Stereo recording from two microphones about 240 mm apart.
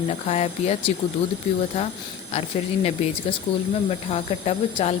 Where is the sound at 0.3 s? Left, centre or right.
Left.